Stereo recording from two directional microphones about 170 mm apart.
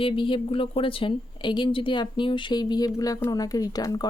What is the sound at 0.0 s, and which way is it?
A woman's voice, 30° left (ahead or behind).